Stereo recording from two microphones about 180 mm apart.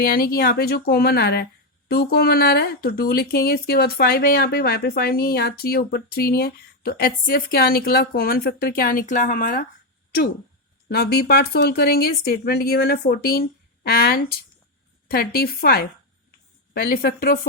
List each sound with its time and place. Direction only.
0.0 s speech: 55° left (ahead or behind)
10.8 s speech: 60° left (ahead or behind)